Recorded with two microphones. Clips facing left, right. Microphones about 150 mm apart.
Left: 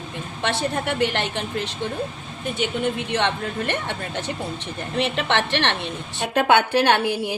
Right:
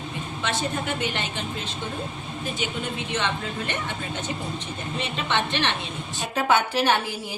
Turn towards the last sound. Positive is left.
turn(degrees=65)  # may be behind; listen again after turning